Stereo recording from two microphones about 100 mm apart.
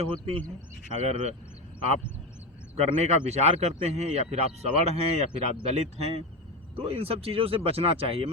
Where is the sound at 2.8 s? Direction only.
90° right.